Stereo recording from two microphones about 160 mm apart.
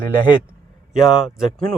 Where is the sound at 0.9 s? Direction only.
Centre (ahead or behind).